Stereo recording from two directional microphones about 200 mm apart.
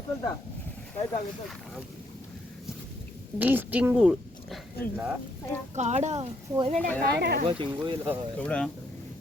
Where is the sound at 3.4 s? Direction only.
10° right (ahead or behind).